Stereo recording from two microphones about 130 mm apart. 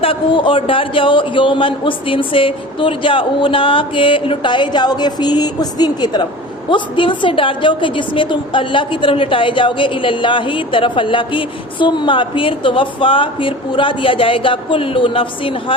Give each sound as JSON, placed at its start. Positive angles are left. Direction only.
{"t": 0.0, "sound": "a woman's voice", "side_deg": 40}